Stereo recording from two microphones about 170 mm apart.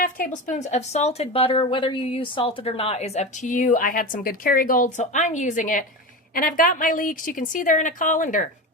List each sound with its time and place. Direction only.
0.0 s a woman's voice: 50° left (ahead or behind)